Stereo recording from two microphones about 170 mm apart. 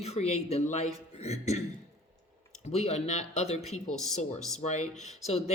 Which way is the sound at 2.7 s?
40° left (ahead or behind).